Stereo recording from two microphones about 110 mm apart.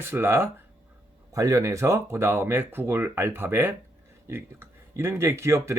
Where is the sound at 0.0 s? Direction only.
20° right (ahead or behind).